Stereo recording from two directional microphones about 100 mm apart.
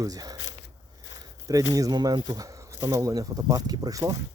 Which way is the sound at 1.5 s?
35° right (ahead or behind).